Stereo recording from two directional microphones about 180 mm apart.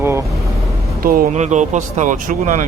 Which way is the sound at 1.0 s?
45° right (ahead or behind).